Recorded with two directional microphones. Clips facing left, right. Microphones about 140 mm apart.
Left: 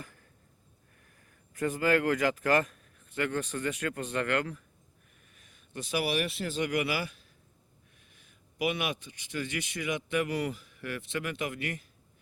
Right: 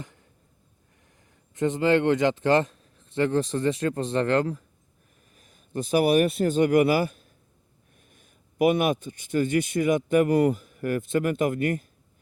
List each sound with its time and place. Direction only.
0.0 s a sound: 20° right (ahead or behind)
1.0 s speech: 20° right (ahead or behind)
5.3 s a man's voice: 40° right (ahead or behind)